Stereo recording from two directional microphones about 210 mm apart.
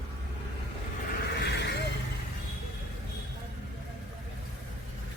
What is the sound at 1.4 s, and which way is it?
Horse, 50° left (ahead or behind).